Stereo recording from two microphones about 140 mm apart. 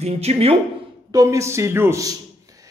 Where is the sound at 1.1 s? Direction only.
20° right (ahead or behind).